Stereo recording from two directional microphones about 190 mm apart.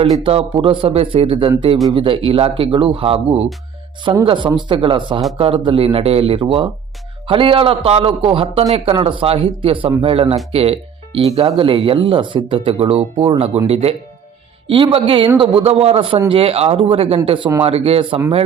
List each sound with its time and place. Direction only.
0.0 s speech: 30° right (ahead or behind)